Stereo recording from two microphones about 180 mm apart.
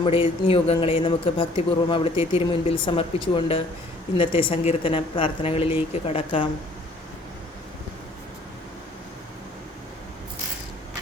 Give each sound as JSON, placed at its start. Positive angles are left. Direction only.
{"t": 0.0, "sound": "a woman's voice", "side_deg": 30}